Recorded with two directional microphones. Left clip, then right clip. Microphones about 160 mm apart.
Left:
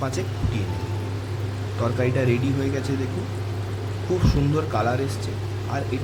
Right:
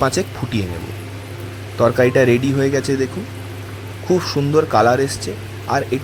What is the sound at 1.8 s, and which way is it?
Speech, 50° right (ahead or behind).